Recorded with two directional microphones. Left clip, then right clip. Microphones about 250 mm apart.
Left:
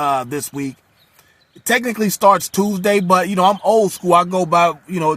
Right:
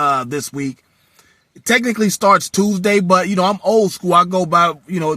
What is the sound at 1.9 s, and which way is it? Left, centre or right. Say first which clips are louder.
Speech: left 2 dB; left.